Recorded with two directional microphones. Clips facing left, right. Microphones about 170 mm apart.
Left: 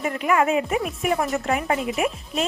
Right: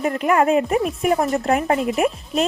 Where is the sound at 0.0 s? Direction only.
40° right (ahead or behind).